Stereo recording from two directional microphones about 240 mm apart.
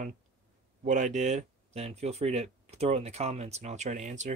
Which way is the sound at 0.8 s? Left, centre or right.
Right.